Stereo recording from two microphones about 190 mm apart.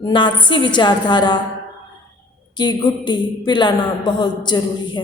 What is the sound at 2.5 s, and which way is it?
A woman's voice, 25° left (ahead or behind).